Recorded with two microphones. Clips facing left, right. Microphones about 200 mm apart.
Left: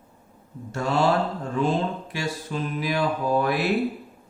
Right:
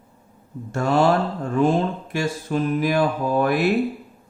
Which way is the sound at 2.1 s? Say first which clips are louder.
Right 9 dB; 50° right (ahead or behind).